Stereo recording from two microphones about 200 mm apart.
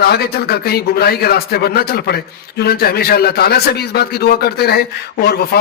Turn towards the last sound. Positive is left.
turn(degrees=55)  # may be behind; listen again after turning